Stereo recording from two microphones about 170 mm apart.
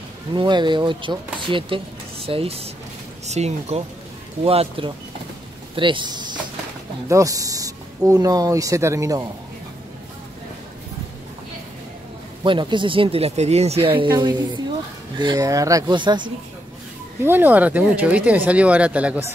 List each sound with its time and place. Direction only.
0.3 s speech: 25° right (ahead or behind)
12.4 s speech: 30° right (ahead or behind)
17.2 s speech: 10° right (ahead or behind)